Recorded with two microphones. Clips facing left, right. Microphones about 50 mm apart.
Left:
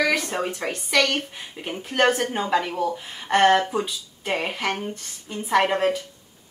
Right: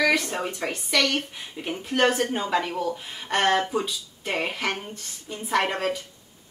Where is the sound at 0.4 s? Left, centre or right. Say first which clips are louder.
Left 2 dB; centre.